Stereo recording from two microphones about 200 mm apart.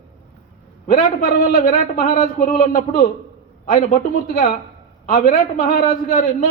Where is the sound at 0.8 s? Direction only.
45° left (ahead or behind).